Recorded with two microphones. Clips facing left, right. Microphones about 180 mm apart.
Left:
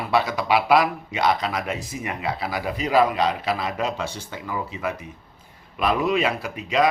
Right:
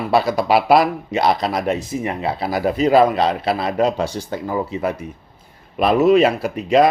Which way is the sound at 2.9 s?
30° right (ahead or behind).